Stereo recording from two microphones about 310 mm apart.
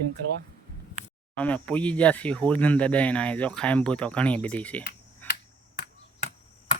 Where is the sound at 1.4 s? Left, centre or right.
Centre.